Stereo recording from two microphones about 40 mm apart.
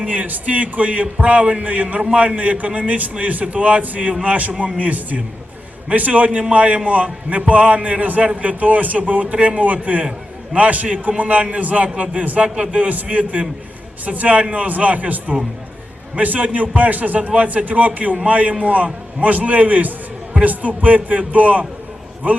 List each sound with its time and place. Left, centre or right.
0.0 s speech: right
0.3 s a man's voice: right